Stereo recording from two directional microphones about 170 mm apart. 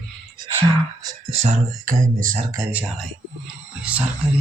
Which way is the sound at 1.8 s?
50° right (ahead or behind).